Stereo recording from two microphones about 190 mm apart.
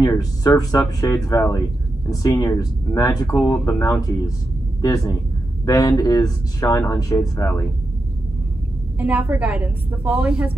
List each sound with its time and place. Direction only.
0.0 s speech: 20° left (ahead or behind)
8.9 s a woman's voice: 10° right (ahead or behind)